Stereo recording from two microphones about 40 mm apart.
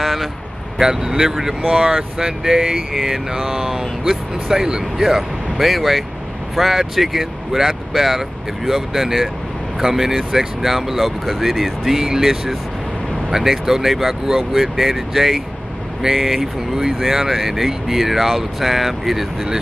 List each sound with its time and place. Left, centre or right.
0.0 s a sound: centre
0.7 s speech: centre
5.6 s speech: centre